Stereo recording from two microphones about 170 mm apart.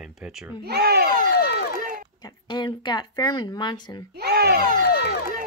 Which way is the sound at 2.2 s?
25° left (ahead or behind).